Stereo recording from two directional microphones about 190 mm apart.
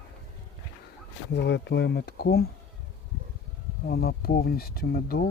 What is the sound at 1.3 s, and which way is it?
Speech, 65° left (ahead or behind).